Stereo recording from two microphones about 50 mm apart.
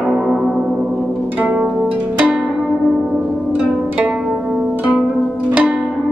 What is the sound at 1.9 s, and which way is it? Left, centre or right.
Pizzicato, right.